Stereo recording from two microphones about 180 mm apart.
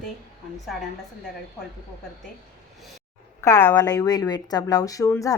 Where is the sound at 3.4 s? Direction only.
15° left (ahead or behind).